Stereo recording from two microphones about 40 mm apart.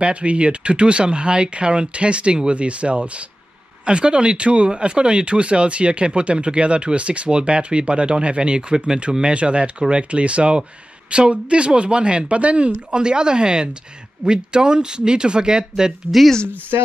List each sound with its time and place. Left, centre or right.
0.0 s speech: right
9.3 s speech: right
12.9 s speech: right